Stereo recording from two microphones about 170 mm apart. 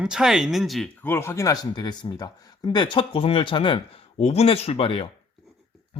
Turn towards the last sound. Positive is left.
turn(degrees=35)  # may be behind; listen again after turning